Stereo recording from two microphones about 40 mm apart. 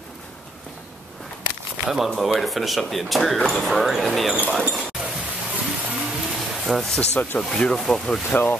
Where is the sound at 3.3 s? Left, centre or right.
Centre.